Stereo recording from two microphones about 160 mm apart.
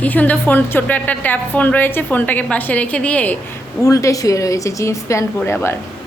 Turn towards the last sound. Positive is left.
turn(degrees=15)  # may be behind; listen again after turning